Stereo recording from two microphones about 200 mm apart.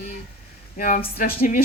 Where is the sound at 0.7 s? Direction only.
40° left (ahead or behind).